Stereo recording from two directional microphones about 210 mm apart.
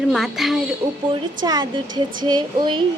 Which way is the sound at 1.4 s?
20° right (ahead or behind).